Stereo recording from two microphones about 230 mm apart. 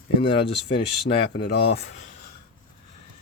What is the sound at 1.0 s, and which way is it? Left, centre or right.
Speech, left.